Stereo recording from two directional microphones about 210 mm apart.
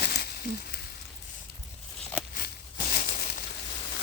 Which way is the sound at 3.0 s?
35° left (ahead or behind).